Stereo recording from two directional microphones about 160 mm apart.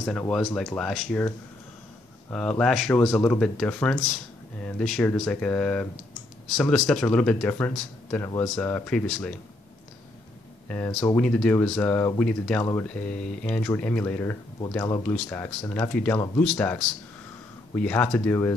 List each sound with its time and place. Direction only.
0.6 s speech: centre (ahead or behind)
2.3 s speech: 5° left (ahead or behind)
10.7 s speech: 5° left (ahead or behind)